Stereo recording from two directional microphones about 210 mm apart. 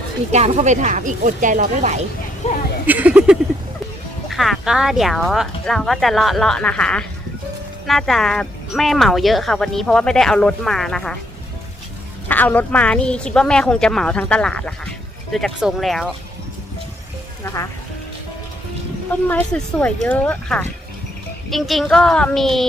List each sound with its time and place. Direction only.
0.3 s speech: 30° right (ahead or behind)
2.4 s speech: 30° left (ahead or behind)
2.8 s speech: 10° right (ahead or behind)
12.3 s speech: 10° left (ahead or behind)
17.4 s speech: 15° left (ahead or behind)
19.3 s speech: 10° left (ahead or behind)